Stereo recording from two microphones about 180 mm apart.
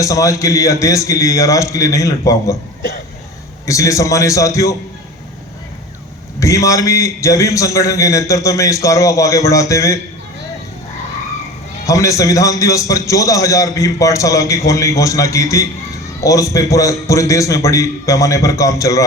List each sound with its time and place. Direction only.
0.0 s a man's voice: 15° left (ahead or behind)
3.7 s a man's voice: 15° left (ahead or behind)
6.4 s a man's voice: 15° left (ahead or behind)
11.9 s a man's voice: 15° left (ahead or behind)